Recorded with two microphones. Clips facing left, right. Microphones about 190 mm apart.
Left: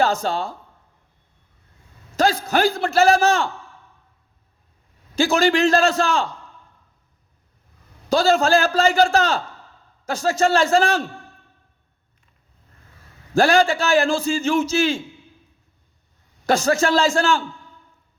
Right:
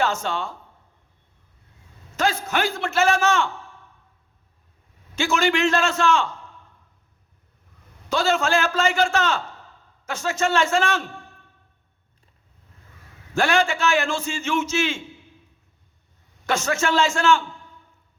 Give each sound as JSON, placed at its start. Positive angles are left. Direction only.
{"t": 0.0, "sound": "a man's voice", "side_deg": 35}
{"t": 2.1, "sound": "a man's voice", "side_deg": 35}
{"t": 5.1, "sound": "a man's voice", "side_deg": 35}
{"t": 8.1, "sound": "a man's voice", "side_deg": 35}
{"t": 13.3, "sound": "a man's voice", "side_deg": 35}
{"t": 16.5, "sound": "a man's voice", "side_deg": 35}